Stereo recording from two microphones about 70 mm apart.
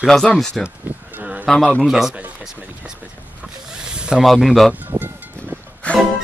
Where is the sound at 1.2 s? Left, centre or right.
Centre.